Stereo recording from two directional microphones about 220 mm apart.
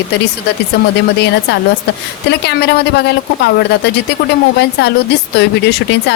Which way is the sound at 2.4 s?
50° left (ahead or behind).